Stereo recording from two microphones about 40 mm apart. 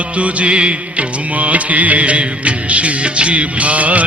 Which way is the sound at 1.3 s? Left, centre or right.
Right.